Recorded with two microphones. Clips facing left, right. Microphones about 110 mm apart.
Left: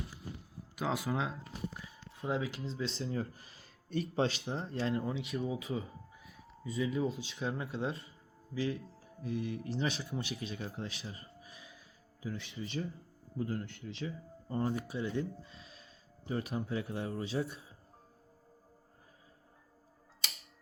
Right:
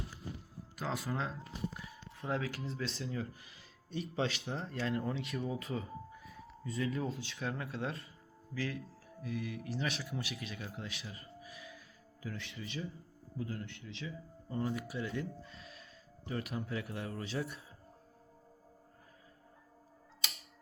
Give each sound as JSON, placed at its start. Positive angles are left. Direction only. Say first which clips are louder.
{"t": 0.8, "sound": "speech", "louder": "left 3 dB", "side_deg": 0}
{"t": 2.3, "sound": "a man's voice", "louder": "left 1 dB", "side_deg": 25}
{"t": 5.4, "sound": "music", "louder": "left 2 dB", "side_deg": 0}
{"t": 7.1, "sound": "a man's voice", "louder": "left 2 dB", "side_deg": 25}
{"t": 13.4, "sound": "speech", "louder": "left 5 dB", "side_deg": 45}
{"t": 13.7, "sound": "a man's voice", "louder": "left 4 dB", "side_deg": 35}